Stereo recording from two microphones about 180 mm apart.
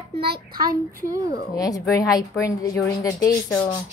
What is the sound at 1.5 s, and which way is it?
A woman's voice, 20° left (ahead or behind).